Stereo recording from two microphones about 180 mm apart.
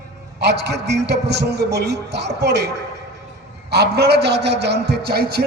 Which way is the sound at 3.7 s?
65° right (ahead or behind).